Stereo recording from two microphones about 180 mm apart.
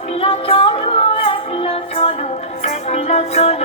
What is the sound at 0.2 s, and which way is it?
Music, 30° left (ahead or behind).